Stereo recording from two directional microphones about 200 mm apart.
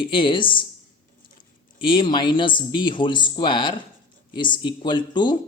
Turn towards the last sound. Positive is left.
turn(degrees=20)  # may be behind; listen again after turning